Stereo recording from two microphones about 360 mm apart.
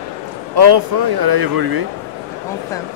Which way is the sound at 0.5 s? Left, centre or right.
Right.